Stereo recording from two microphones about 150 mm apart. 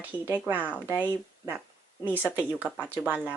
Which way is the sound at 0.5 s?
10° right (ahead or behind).